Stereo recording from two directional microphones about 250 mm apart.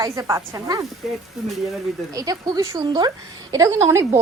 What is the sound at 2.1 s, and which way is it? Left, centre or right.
A woman's voice, centre.